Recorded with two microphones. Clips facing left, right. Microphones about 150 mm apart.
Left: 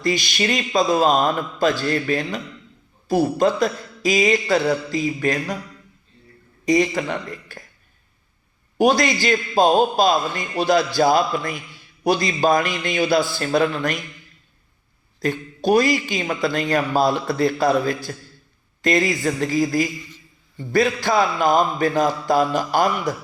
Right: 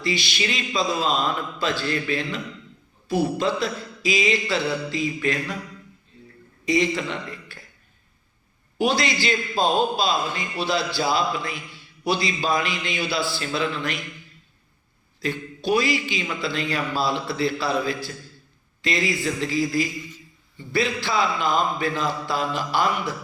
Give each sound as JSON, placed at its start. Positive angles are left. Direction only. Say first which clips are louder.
{"t": 0.0, "sound": "a man's voice", "louder": "left 5 dB", "side_deg": 45}
{"t": 6.7, "sound": "a man's voice", "louder": "left 4 dB", "side_deg": 45}
{"t": 8.8, "sound": "a man's voice", "louder": "left 5 dB", "side_deg": 45}
{"t": 15.2, "sound": "a man's voice", "louder": "left 5 dB", "side_deg": 45}